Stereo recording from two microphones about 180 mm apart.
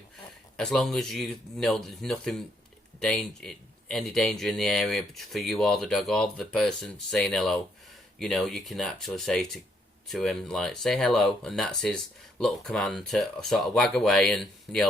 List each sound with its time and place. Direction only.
0.5 s speech: 5° left (ahead or behind)